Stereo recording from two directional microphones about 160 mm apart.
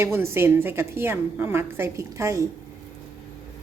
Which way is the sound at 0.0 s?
15° right (ahead or behind).